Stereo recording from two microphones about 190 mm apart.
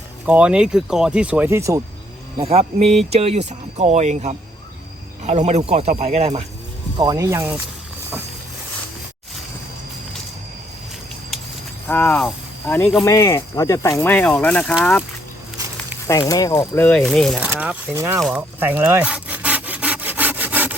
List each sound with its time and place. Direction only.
0.3 s speech: 5° right (ahead or behind)
2.4 s speech: 30° right (ahead or behind)
6.9 s speech: 20° right (ahead or behind)
11.9 s speech: 10° left (ahead or behind)
16.0 s speech: 15° left (ahead or behind)
17.0 s speech: centre (ahead or behind)
17.5 s speech: 10° right (ahead or behind)
18.2 s sawing: 5° right (ahead or behind)